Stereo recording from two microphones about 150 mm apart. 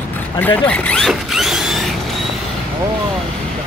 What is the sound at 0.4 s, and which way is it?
Speech, 10° left (ahead or behind).